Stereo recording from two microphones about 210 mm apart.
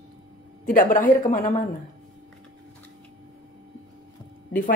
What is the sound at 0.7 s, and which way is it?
Speech, 40° left (ahead or behind).